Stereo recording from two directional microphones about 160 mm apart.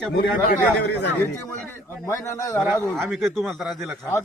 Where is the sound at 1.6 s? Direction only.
15° left (ahead or behind).